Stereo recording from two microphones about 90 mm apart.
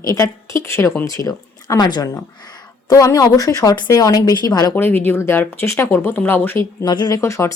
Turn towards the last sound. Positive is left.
turn(degrees=35)  # may be behind; listen again after turning